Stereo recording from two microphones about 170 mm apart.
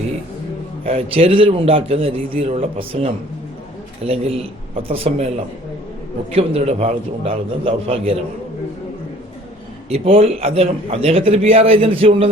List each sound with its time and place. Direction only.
0.9 s a man's voice: 35° right (ahead or behind)
6.3 s a man's voice: 35° right (ahead or behind)
9.9 s a man's voice: 35° right (ahead or behind)